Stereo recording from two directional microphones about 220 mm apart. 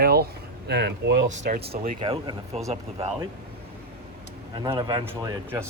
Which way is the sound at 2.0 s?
25° right (ahead or behind).